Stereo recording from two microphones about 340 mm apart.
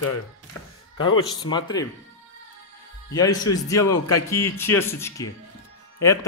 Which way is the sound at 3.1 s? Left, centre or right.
Centre.